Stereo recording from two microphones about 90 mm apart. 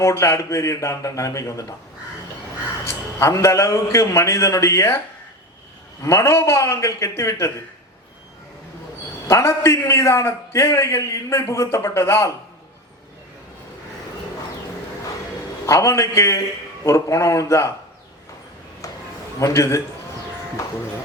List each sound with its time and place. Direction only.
0.0 s a man's voice: 30° left (ahead or behind)
2.8 s a man's voice: 30° left (ahead or behind)
6.0 s a man's voice: 30° left (ahead or behind)
9.2 s a man's voice: 30° left (ahead or behind)
15.6 s a man's voice: 35° left (ahead or behind)
19.4 s a man's voice: 35° left (ahead or behind)